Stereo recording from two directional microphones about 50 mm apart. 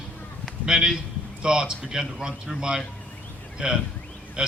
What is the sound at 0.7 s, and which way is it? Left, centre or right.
Speech, centre.